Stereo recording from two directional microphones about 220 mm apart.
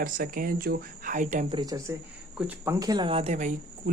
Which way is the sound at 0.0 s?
40° right (ahead or behind).